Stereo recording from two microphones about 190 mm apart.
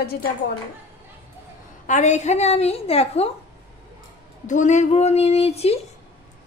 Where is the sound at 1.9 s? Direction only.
40° left (ahead or behind).